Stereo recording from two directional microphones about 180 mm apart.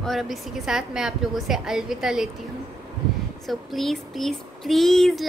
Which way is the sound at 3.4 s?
Centre (ahead or behind).